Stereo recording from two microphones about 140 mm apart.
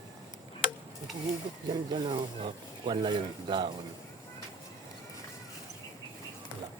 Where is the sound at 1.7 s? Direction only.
35° right (ahead or behind).